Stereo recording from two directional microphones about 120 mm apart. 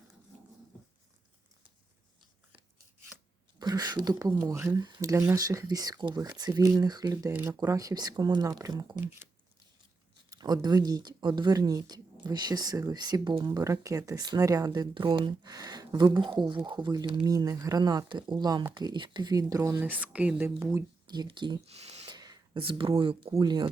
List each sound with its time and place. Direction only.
3.6 s speech: 35° right (ahead or behind)
10.2 s speech: 30° right (ahead or behind)
19.8 s speech: 15° right (ahead or behind)
20.7 s speech: 35° right (ahead or behind)
21.7 s speech: 60° right (ahead or behind)
22.0 s speech: 35° right (ahead or behind)